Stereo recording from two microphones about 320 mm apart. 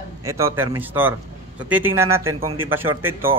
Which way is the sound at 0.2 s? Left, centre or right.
Centre.